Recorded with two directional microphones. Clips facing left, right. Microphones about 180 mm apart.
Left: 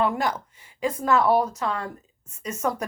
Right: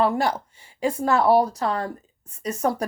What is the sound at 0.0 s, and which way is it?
Speech, 30° right (ahead or behind).